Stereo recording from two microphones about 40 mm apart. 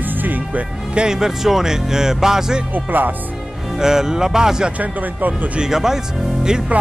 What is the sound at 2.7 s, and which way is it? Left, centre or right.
Speech, right.